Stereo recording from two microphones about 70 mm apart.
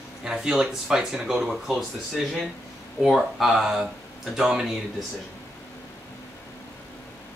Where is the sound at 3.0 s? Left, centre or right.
Centre.